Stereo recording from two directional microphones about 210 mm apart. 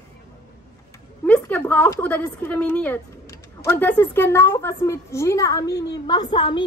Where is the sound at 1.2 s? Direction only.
5° left (ahead or behind).